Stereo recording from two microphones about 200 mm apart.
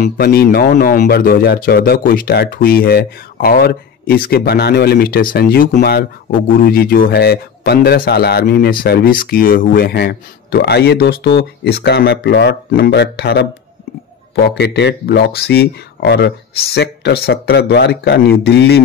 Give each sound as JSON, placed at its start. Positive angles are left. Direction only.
{"t": 0.0, "sound": "speech", "side_deg": 50}